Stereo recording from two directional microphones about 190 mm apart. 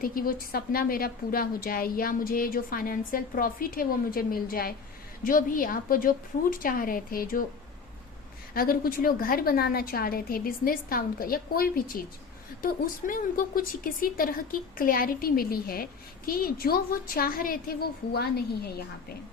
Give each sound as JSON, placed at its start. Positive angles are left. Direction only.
{"t": 0.0, "sound": "a woman's voice", "side_deg": 50}
{"t": 8.5, "sound": "a woman's voice", "side_deg": 50}